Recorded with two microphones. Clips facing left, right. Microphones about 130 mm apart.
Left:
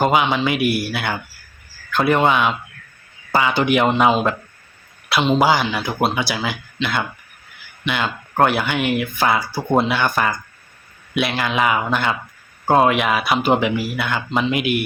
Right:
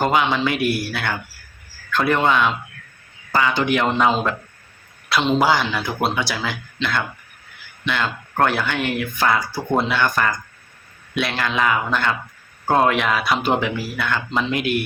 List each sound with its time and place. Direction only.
0.0 s speech: 5° left (ahead or behind)